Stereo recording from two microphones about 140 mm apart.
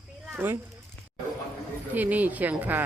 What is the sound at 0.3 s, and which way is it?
Speech, 15° right (ahead or behind).